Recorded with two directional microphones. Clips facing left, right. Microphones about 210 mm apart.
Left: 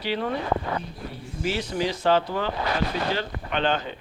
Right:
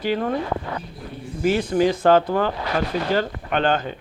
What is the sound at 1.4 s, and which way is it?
Speech, 50° right (ahead or behind).